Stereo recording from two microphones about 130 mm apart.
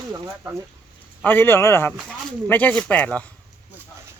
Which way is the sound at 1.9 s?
Centre (ahead or behind).